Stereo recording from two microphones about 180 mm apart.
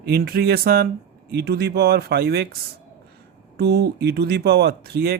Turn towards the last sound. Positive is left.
turn(degrees=-60)  # may be behind; listen again after turning